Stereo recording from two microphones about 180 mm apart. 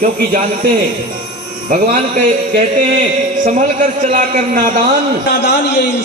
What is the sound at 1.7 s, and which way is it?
A man's voice, 45° right (ahead or behind).